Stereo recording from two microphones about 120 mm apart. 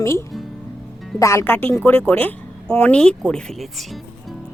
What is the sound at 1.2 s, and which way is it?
A woman's voice, 25° left (ahead or behind).